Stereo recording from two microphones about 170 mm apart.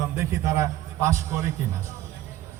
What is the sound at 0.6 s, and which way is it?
Music, 15° right (ahead or behind).